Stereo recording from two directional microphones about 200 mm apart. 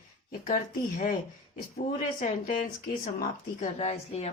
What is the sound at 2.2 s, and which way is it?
A woman's voice, 40° left (ahead or behind).